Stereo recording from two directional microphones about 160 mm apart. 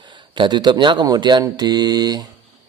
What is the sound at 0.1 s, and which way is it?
Speech, 30° right (ahead or behind).